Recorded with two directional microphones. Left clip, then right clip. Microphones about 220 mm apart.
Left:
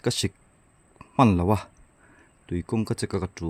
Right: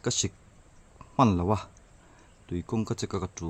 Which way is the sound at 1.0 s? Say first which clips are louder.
Left 3 dB; 25° left (ahead or behind).